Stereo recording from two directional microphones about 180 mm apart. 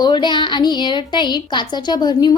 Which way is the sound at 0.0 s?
25° left (ahead or behind).